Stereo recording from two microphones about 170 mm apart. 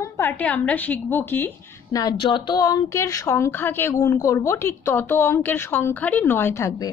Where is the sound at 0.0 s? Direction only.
15° left (ahead or behind).